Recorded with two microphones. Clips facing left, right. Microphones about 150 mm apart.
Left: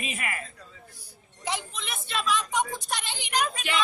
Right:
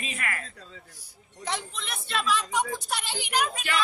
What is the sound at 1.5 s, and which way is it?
A woman's voice, centre (ahead or behind).